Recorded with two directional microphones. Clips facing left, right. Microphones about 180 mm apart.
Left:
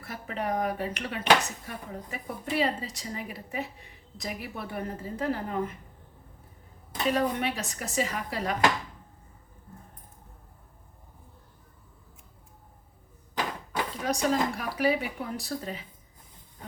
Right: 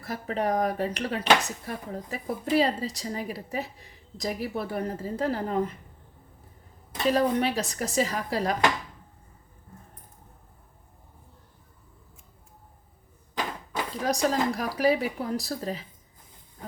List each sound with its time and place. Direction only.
0.0 s speech: 40° right (ahead or behind)
7.1 s speech: 35° right (ahead or behind)
14.0 s speech: 40° right (ahead or behind)